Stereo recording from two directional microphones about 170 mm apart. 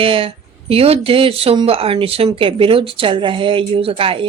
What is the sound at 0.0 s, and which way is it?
Speech, 30° right (ahead or behind).